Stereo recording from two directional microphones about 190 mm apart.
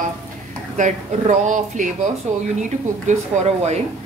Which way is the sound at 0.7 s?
40° right (ahead or behind).